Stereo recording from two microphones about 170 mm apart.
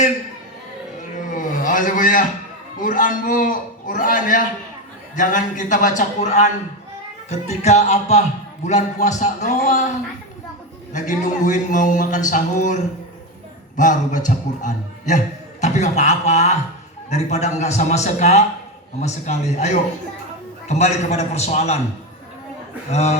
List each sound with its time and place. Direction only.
1.1 s a sound: 50° left (ahead or behind)
2.8 s a man's voice: 50° left (ahead or behind)
7.6 s a man's voice: 40° left (ahead or behind)
10.9 s a man's voice: 45° left (ahead or behind)
22.9 s a man's voice: 40° left (ahead or behind)